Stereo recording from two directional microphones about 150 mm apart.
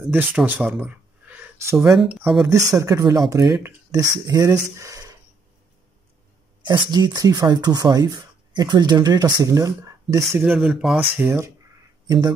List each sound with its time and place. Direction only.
0.0 s speech: 5° right (ahead or behind)
1.9 s speech: centre (ahead or behind)
2.4 s speech: 20° right (ahead or behind)
4.7 s a sound: 20° right (ahead or behind)
6.6 s speech: 30° right (ahead or behind)
10.5 s speech: 5° right (ahead or behind)
11.1 s speech: 15° right (ahead or behind)